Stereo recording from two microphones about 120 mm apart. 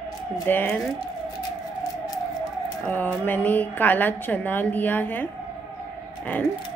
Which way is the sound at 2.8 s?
10° left (ahead or behind).